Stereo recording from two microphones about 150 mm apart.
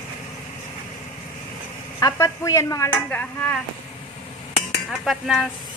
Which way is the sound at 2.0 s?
25° left (ahead or behind).